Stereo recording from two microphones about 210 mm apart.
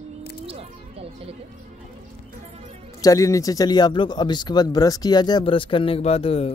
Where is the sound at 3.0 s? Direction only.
15° left (ahead or behind).